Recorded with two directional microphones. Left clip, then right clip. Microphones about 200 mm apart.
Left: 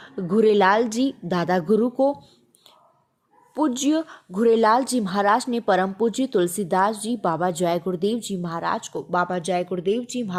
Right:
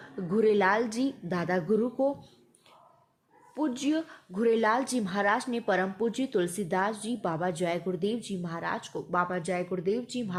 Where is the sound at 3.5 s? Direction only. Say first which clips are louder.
Left 8 dB; 30° left (ahead or behind).